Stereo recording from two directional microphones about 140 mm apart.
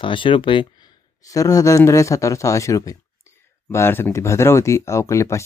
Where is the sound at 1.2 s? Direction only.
25° left (ahead or behind).